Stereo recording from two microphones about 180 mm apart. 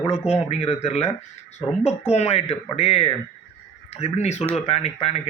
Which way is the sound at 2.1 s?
35° left (ahead or behind).